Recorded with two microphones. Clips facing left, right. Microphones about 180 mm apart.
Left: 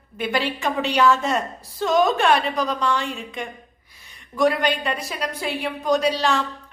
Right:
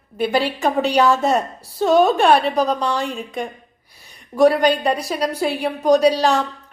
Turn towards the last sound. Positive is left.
turn(degrees=-35)  # may be behind; listen again after turning